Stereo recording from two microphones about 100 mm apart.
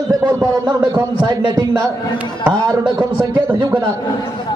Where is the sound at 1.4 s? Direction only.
45° right (ahead or behind).